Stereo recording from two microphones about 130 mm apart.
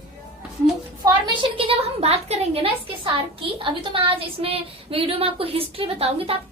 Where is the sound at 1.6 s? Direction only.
50° right (ahead or behind).